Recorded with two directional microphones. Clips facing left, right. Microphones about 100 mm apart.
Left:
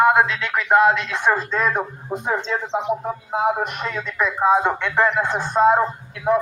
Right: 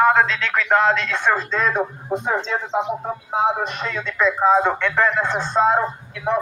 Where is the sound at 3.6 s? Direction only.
10° left (ahead or behind).